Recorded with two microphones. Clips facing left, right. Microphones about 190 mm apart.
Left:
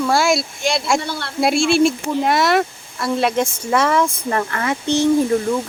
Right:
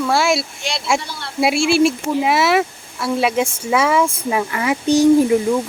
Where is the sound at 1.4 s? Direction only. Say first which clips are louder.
Even; 5° right (ahead or behind).